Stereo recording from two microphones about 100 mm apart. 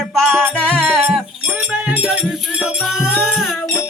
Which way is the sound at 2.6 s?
10° right (ahead or behind).